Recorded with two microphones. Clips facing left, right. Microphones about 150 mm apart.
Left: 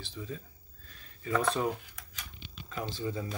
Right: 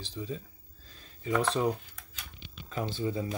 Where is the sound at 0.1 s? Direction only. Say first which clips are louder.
Right 4 dB; 20° right (ahead or behind).